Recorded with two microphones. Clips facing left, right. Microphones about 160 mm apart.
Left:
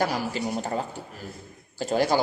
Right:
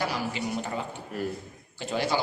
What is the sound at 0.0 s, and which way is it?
A man's voice, 40° left (ahead or behind).